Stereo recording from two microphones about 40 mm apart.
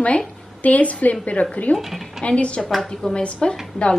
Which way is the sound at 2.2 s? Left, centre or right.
Left.